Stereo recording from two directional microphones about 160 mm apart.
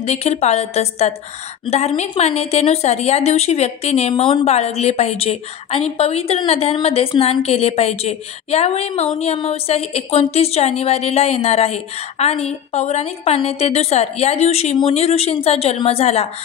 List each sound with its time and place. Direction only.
0.0 s a woman's voice: 40° left (ahead or behind)